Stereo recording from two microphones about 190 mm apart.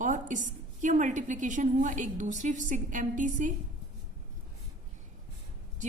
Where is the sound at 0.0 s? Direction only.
40° right (ahead or behind).